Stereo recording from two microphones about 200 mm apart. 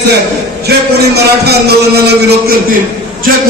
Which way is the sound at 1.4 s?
55° right (ahead or behind).